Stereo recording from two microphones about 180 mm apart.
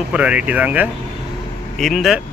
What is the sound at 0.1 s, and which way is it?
Speech, 5° right (ahead or behind).